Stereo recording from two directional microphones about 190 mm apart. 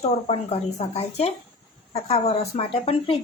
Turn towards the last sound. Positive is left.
turn(degrees=30)  # may be behind; listen again after turning